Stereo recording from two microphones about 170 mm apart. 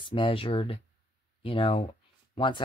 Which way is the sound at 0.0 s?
30° left (ahead or behind).